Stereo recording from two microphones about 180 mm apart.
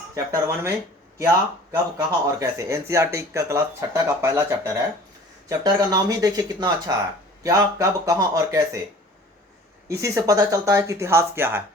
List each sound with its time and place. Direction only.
0.1 s speech: 15° right (ahead or behind)
9.9 s speech: 15° right (ahead or behind)